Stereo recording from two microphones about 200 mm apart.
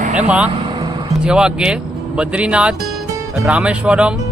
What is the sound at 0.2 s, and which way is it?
Speech, 5° right (ahead or behind).